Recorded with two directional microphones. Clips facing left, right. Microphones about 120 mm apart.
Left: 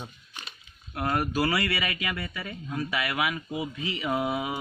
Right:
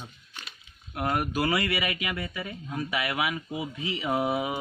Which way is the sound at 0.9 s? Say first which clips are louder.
Left 1 dB; 15° right (ahead or behind).